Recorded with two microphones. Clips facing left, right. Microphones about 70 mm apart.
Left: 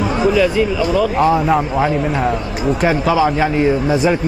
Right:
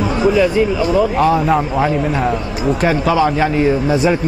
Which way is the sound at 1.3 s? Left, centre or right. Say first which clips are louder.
Even; centre.